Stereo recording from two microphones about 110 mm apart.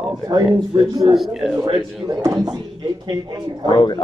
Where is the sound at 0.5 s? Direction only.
40° right (ahead or behind).